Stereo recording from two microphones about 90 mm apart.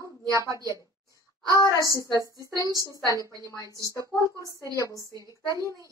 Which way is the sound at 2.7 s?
40° right (ahead or behind).